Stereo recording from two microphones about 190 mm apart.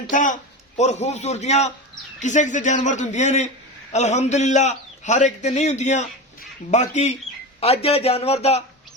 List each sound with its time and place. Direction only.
0.1 s a man's voice: 45° left (ahead or behind)